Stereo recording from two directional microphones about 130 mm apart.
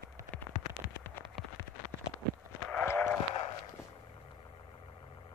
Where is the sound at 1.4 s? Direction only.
Centre (ahead or behind).